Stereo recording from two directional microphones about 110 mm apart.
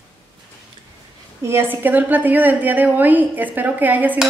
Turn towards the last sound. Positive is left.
turn(degrees=-15)  # may be behind; listen again after turning